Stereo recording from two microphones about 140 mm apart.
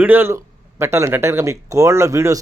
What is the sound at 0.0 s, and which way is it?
A man's voice, 15° right (ahead or behind).